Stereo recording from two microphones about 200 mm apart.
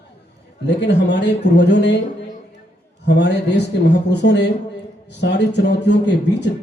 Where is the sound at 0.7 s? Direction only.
60° left (ahead or behind).